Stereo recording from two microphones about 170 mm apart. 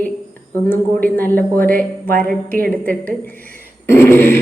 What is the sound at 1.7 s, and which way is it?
Speech, 55° right (ahead or behind).